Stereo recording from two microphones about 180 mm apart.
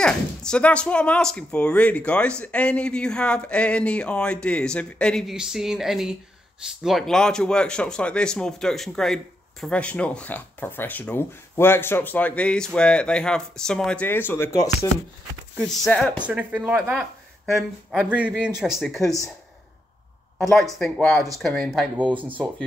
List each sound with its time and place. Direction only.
0.0 s speech: 5° left (ahead or behind)
15.8 s speech: 5° left (ahead or behind)
16.3 s speech: 10° right (ahead or behind)
20.3 s speech: centre (ahead or behind)